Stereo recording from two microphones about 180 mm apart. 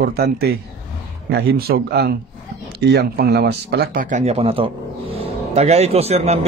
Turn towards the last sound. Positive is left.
turn(degrees=-35)  # may be behind; listen again after turning